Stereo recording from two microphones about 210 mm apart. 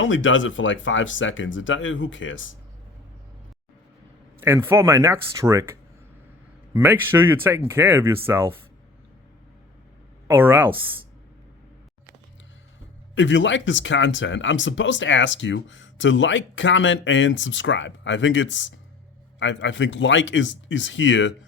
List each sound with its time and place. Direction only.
0.0 s speech: 65° left (ahead or behind)
4.4 s speech: 10° right (ahead or behind)
6.7 s speech: 10° right (ahead or behind)
10.2 s speech: 10° right (ahead or behind)
13.1 s speech: 60° left (ahead or behind)